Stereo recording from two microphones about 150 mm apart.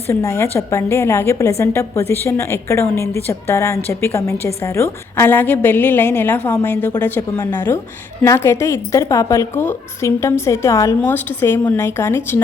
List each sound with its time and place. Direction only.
0.1 s a woman's voice: 20° left (ahead or behind)